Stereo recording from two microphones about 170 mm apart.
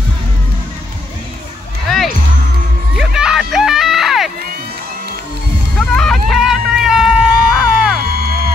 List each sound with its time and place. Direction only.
3.0 s music: 5° right (ahead or behind)
5.8 s a sound: 5° left (ahead or behind)
8.0 s music: 65° right (ahead or behind)